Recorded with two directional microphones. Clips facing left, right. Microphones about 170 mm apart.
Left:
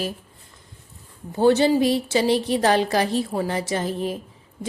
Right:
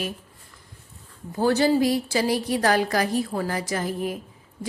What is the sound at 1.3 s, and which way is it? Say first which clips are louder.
A woman's voice: left 3 dB; 25° left (ahead or behind).